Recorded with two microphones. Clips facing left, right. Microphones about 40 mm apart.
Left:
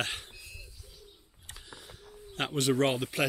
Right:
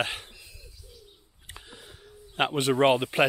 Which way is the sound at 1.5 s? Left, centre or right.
Centre.